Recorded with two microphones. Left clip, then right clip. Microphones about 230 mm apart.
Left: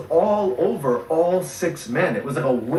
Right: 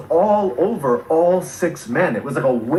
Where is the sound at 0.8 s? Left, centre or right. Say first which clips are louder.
Right 6 dB; centre.